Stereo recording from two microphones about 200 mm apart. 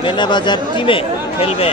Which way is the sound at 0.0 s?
20° left (ahead or behind).